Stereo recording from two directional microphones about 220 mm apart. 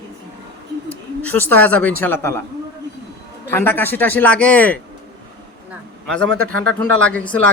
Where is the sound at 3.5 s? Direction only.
10° left (ahead or behind).